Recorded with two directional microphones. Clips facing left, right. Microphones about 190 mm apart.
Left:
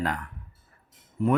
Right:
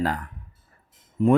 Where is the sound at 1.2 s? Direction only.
20° right (ahead or behind).